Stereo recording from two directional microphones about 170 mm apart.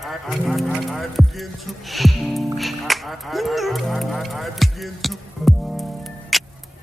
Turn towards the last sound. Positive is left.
turn(degrees=0)  # may be behind; listen again after turning